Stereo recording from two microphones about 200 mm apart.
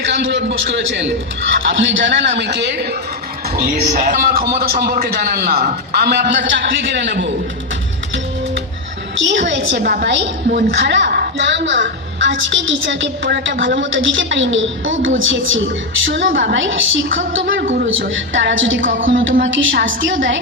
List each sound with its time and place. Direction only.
0.0 s a woman's voice: 65° right (ahead or behind)
2.4 s a woman's voice: 55° right (ahead or behind)
3.6 s a man's voice: 40° right (ahead or behind); by 7.3 s 60° right (ahead or behind)
9.1 s a woman's voice: 65° right (ahead or behind)